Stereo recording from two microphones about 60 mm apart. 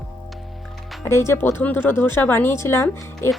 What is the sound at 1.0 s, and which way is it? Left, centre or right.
Speech, left.